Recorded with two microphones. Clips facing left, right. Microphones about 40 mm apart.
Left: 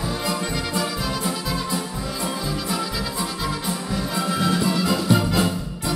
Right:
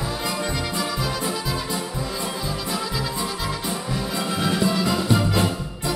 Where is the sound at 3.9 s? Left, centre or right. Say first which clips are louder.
Left 2 dB; centre.